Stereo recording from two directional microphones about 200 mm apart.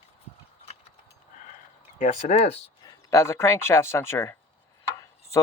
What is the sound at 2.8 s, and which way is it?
Speech, 15° left (ahead or behind).